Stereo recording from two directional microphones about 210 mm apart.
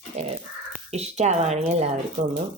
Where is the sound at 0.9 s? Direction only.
30° right (ahead or behind).